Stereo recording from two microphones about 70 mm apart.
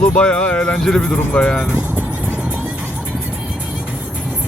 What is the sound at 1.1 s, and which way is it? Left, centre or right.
Speech, centre.